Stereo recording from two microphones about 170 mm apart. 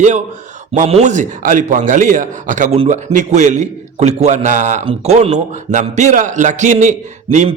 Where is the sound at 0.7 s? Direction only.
40° right (ahead or behind).